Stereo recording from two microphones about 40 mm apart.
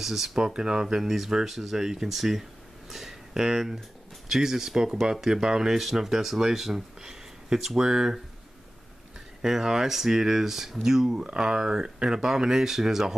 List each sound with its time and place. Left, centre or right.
0.0 s speech: centre
0.4 s speech: centre
2.9 s a sound: centre
4.3 s speech: centre
9.4 s speech: centre